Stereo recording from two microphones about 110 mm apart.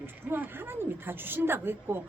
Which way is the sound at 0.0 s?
20° right (ahead or behind).